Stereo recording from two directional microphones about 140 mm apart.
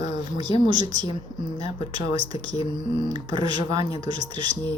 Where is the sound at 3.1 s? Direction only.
30° right (ahead or behind).